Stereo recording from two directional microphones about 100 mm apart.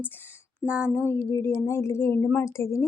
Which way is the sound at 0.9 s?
25° left (ahead or behind).